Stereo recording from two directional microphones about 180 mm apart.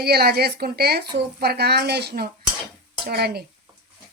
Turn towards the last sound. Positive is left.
turn(degrees=-60)  # may be behind; listen again after turning